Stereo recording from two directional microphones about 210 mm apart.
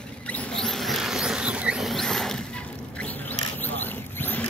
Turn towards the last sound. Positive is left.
turn(degrees=10)  # may be behind; listen again after turning